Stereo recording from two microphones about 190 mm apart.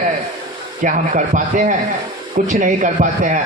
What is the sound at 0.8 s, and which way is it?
A man's voice, 40° right (ahead or behind).